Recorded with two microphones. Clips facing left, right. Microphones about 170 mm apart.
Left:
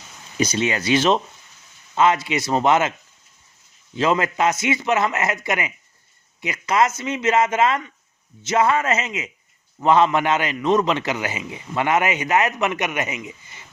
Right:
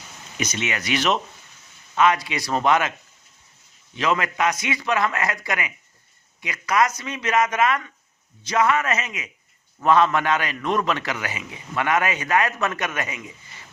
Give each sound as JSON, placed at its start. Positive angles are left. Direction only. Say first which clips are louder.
{"t": 0.3, "sound": "a man's voice", "louder": "left 6 dB", "side_deg": 30}
{"t": 3.9, "sound": "a man's voice", "louder": "left 3 dB", "side_deg": 30}